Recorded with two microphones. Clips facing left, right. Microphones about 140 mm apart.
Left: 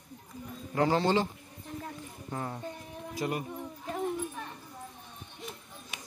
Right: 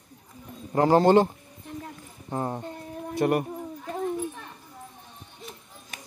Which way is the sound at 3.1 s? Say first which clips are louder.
Right 10 dB; 60° right (ahead or behind).